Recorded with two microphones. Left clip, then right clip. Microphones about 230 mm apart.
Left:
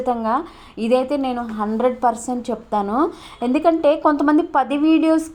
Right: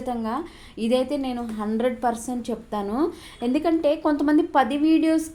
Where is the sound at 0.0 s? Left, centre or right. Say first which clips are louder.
Left 8 dB; left.